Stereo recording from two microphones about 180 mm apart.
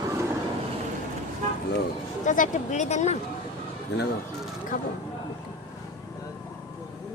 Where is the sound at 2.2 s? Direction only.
45° left (ahead or behind).